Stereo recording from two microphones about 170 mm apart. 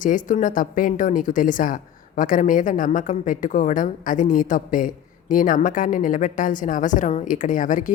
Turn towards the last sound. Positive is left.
turn(degrees=50)  # may be behind; listen again after turning